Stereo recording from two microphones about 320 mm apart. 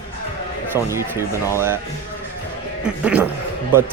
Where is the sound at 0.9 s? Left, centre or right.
Centre.